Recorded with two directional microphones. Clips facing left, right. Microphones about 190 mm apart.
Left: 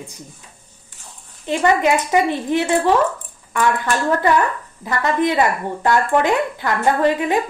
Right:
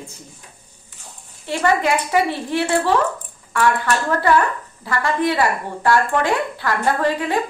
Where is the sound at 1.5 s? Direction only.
20° left (ahead or behind).